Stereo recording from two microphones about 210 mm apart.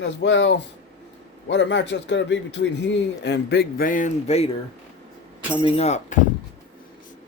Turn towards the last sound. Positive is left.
turn(degrees=30)  # may be behind; listen again after turning